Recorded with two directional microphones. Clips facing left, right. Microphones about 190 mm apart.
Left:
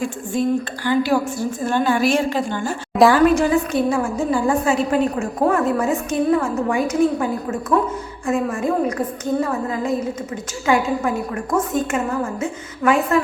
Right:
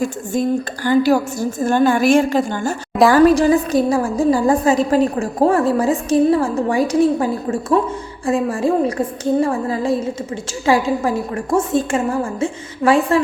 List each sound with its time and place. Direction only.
0.3 s a woman's voice: 45° right (ahead or behind)